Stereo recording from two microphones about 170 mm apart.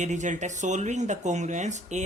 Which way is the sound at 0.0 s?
45° right (ahead or behind).